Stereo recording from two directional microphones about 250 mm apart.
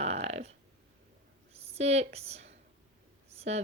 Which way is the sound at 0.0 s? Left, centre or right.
Right.